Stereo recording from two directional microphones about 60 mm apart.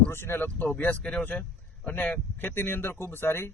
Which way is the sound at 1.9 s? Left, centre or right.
Left.